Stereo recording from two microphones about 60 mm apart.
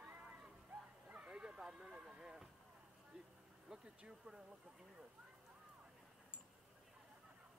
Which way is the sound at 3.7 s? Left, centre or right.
Centre.